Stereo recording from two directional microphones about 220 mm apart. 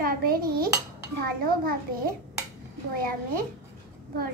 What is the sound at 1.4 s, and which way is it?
A child's voice, 40° right (ahead or behind).